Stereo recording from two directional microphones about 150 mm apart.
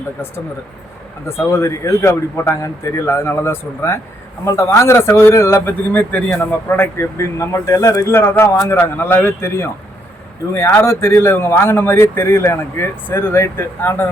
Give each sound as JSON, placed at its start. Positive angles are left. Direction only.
{"t": 1.3, "sound": "speech", "side_deg": 20}